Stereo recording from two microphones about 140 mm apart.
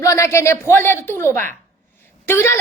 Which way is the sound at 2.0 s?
15° left (ahead or behind).